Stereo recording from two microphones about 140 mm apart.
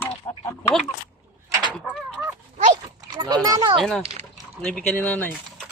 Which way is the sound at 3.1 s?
30° right (ahead or behind).